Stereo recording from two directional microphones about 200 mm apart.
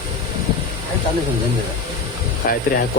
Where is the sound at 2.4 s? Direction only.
45° left (ahead or behind).